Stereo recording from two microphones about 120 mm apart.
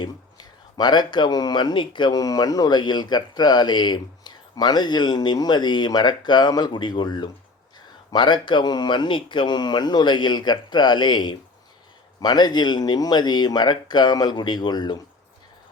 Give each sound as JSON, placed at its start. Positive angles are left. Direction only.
{"t": 0.0, "sound": "speech", "side_deg": 35}